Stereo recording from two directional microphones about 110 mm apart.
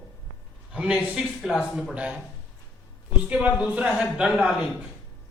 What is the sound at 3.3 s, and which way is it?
A man's voice, 10° right (ahead or behind).